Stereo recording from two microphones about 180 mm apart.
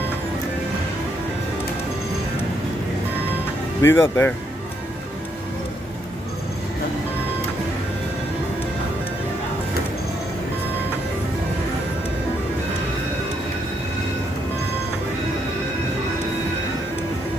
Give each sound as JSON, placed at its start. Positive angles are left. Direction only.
{"t": 3.8, "sound": "speech", "side_deg": 15}